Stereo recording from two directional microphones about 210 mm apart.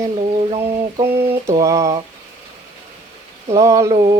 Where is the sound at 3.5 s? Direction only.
15° right (ahead or behind).